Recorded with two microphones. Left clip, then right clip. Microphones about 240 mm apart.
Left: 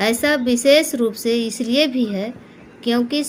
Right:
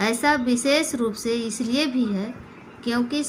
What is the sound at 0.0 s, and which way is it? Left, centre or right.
A woman's voice, centre.